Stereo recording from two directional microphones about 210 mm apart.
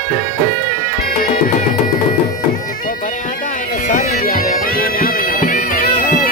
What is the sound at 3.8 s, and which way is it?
Bagpipes, 40° left (ahead or behind).